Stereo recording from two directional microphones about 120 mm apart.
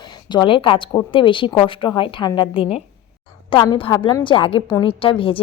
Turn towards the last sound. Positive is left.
turn(degrees=50)  # may be behind; listen again after turning